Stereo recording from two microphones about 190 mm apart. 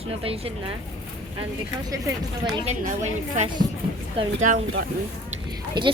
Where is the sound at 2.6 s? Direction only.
40° right (ahead or behind).